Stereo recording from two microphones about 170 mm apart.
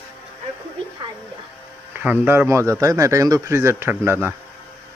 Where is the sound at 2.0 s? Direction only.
10° right (ahead or behind).